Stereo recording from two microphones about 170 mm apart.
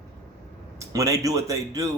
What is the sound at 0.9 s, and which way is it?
Speech, 20° right (ahead or behind).